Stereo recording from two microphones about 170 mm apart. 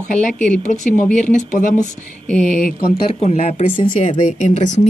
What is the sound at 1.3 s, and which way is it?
Speech, 45° left (ahead or behind).